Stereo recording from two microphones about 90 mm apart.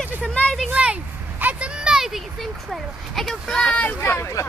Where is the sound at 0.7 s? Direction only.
15° right (ahead or behind); by 4.0 s 15° left (ahead or behind).